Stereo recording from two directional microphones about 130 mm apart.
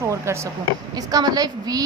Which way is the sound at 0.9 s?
30° right (ahead or behind).